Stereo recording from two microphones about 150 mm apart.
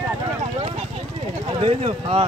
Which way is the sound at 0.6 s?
40° right (ahead or behind).